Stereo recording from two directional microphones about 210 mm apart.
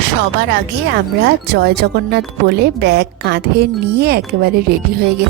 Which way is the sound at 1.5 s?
50° right (ahead or behind).